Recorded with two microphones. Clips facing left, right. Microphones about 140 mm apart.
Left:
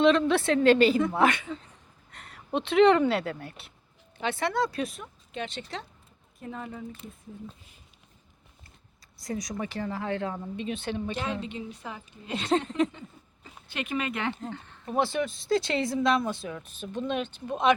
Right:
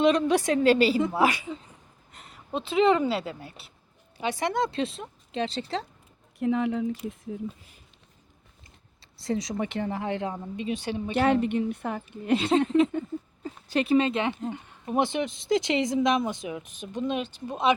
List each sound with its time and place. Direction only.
0.0 s speech: 15° right (ahead or behind)
2.6 s speech: centre (ahead or behind)
4.2 s speech: 15° right (ahead or behind); by 5.8 s 30° right (ahead or behind)
6.4 s speech: 75° right (ahead or behind); by 7.2 s 90° right
9.1 s speech: 25° right (ahead or behind); by 11.1 s 10° right (ahead or behind)
11.1 s a woman's voice: 60° right (ahead or behind)
12.9 s a sound: 45° right (ahead or behind); by 14.3 s 20° right (ahead or behind)
14.4 s speech: 15° right (ahead or behind)